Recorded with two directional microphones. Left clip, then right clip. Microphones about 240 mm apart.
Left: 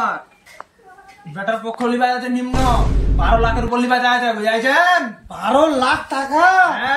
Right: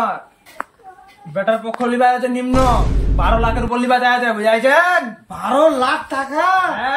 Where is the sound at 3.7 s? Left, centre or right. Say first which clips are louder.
Right 1 dB; centre.